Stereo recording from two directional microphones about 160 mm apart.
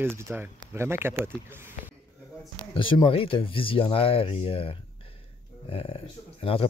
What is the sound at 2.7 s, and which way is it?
Speech, 30° left (ahead or behind).